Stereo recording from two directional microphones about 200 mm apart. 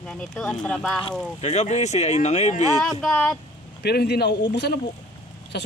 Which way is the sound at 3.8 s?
55° left (ahead or behind).